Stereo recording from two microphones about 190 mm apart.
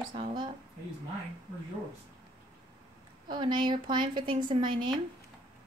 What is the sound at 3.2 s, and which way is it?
A woman's voice, 25° right (ahead or behind).